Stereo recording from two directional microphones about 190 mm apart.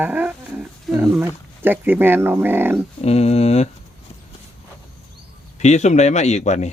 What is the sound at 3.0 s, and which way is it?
Speech, 35° left (ahead or behind).